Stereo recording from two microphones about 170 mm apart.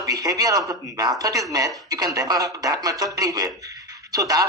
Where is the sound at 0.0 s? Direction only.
20° right (ahead or behind).